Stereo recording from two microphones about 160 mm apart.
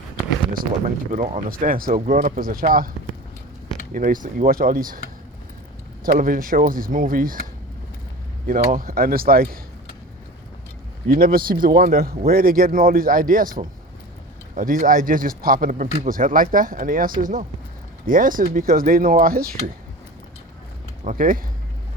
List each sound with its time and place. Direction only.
1.1 s speech: 50° right (ahead or behind)
3.9 s speech: 55° right (ahead or behind)
6.1 s speech: 60° right (ahead or behind)
8.4 s speech: 60° right (ahead or behind)
11.1 s speech: 65° right (ahead or behind)
21.0 s speech: 55° right (ahead or behind)